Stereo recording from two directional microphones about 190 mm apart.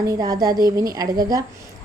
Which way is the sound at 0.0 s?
20° right (ahead or behind).